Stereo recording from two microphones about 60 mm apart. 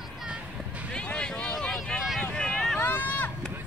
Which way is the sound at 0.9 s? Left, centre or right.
Centre.